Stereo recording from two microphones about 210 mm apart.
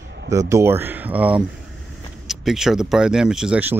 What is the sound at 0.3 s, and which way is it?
Speech, 15° right (ahead or behind).